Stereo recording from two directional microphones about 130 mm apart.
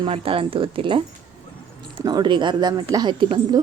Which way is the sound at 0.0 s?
45° right (ahead or behind).